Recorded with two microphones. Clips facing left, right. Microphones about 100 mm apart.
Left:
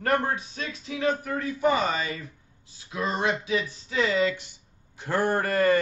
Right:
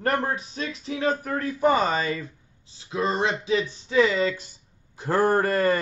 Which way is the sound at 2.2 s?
25° right (ahead or behind).